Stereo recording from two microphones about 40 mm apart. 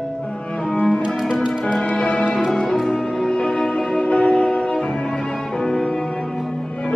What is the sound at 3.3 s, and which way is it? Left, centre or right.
Music, left.